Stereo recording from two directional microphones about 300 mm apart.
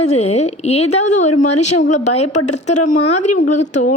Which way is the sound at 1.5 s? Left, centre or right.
Left.